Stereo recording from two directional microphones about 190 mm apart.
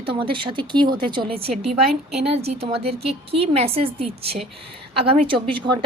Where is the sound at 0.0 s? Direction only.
30° right (ahead or behind).